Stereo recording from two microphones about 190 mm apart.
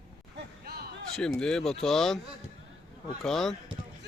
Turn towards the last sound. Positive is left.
turn(degrees=0)  # may be behind; listen again after turning